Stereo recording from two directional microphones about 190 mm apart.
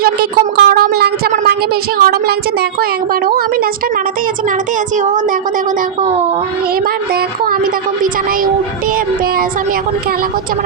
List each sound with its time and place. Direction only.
0.0 s a woman's voice: 55° right (ahead or behind)
4.9 s speech: 40° right (ahead or behind)
6.8 s a woman's voice: 50° right (ahead or behind)